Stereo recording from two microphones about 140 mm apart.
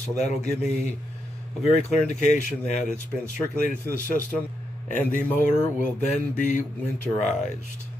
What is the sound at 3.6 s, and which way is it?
Speech, 70° left (ahead or behind).